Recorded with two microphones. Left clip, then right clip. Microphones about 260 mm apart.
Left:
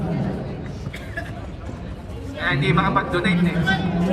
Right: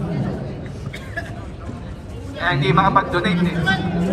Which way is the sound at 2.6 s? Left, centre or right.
Centre.